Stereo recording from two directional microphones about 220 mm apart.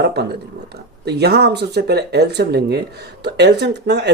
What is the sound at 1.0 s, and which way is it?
Speech, 50° right (ahead or behind).